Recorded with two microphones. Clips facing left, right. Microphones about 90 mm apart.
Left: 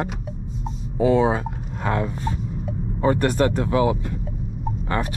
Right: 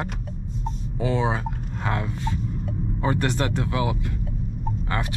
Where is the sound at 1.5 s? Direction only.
5° left (ahead or behind).